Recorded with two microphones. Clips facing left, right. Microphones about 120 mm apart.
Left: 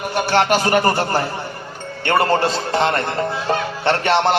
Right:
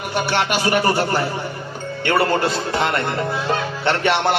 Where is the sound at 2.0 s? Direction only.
35° left (ahead or behind).